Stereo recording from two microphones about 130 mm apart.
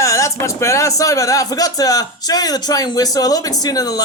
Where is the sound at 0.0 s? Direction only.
25° left (ahead or behind).